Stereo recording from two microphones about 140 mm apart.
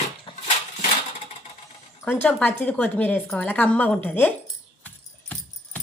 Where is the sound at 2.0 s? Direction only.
15° left (ahead or behind).